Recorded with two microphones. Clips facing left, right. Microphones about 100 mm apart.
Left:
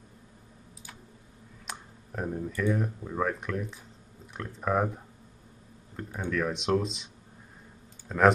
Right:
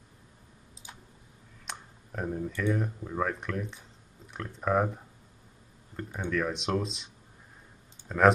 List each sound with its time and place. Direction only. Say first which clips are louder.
1.7 s speech: left 1 dB; centre (ahead or behind)
8.1 s speech: even; centre (ahead or behind)